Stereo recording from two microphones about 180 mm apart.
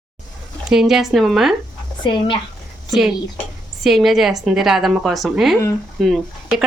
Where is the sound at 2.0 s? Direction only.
25° left (ahead or behind).